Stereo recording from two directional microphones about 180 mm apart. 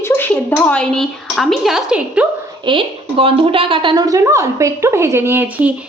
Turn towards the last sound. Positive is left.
turn(degrees=-10)  # may be behind; listen again after turning